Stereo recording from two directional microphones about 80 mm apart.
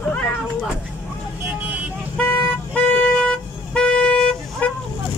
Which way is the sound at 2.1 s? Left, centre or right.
Left.